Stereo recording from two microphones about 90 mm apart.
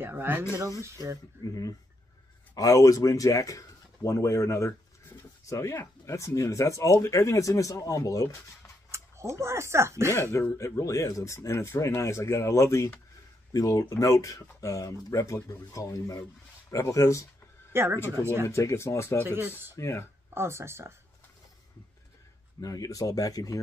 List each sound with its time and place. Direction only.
0.0 s speech: 25° right (ahead or behind)
1.5 s speech: 40° left (ahead or behind)
8.9 s speech: 30° right (ahead or behind)
10.1 s speech: 30° left (ahead or behind)
17.7 s speech: 30° right (ahead or behind)
18.5 s speech: 35° left (ahead or behind)
19.2 s speech: 25° right (ahead or behind)
19.7 s speech: 35° left (ahead or behind)
20.3 s speech: 30° right (ahead or behind)
22.6 s speech: 40° left (ahead or behind)